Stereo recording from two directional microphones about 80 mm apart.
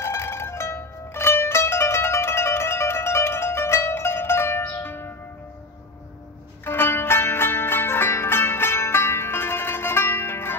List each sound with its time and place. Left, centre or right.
0.0 s zither: left
6.6 s music: left